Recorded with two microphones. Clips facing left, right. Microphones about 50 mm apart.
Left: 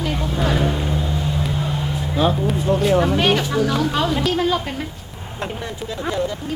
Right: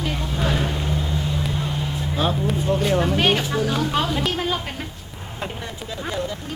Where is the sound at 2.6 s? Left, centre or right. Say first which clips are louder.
Left 4 dB; centre.